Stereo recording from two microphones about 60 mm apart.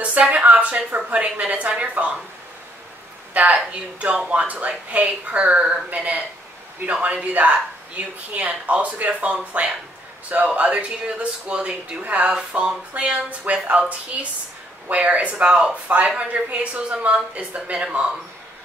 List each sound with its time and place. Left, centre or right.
0.3 s speech: right
3.3 s speech: right